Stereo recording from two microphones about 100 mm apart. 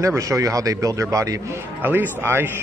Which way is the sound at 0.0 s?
30° right (ahead or behind).